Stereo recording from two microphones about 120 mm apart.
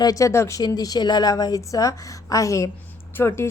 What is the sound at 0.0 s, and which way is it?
A woman's voice, 30° left (ahead or behind).